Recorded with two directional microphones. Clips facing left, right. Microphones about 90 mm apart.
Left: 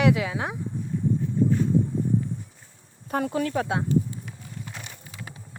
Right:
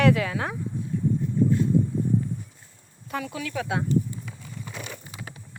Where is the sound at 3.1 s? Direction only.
40° left (ahead or behind).